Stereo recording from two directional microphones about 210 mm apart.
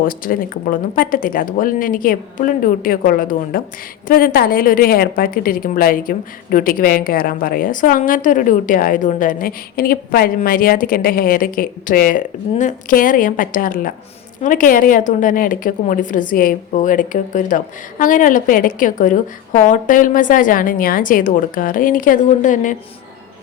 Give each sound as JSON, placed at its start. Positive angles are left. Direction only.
{"t": 0.0, "sound": "a woman's voice", "side_deg": 40}